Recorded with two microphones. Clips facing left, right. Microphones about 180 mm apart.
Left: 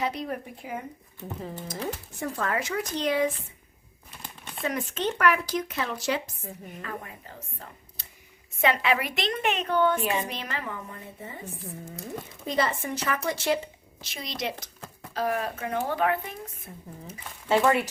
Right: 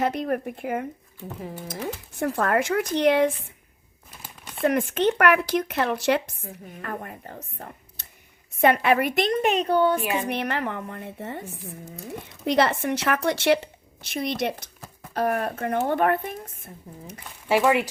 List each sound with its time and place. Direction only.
0.0 s speech: 50° right (ahead or behind)
1.4 s speech: 10° right (ahead or behind)
2.1 s speech: 60° right (ahead or behind)
4.2 s a sound: centre (ahead or behind)
4.6 s a woman's voice: 55° right (ahead or behind); by 10.0 s 35° right (ahead or behind)
10.2 s a woman's voice: 65° right (ahead or behind)
12.5 s a woman's voice: 75° right (ahead or behind)
14.1 s a woman's voice: 60° right (ahead or behind)
16.9 s speech: centre (ahead or behind)